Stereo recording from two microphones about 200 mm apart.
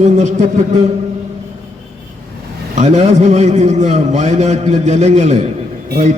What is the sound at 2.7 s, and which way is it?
A man's voice, 35° right (ahead or behind).